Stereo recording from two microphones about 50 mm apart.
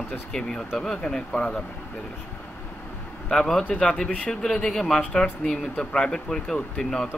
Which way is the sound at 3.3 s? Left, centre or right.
Centre.